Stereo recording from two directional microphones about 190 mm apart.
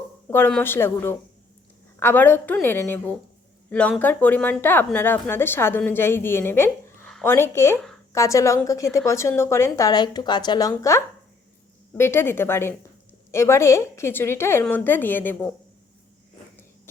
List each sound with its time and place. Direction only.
0.3 s a woman's voice: 10° left (ahead or behind)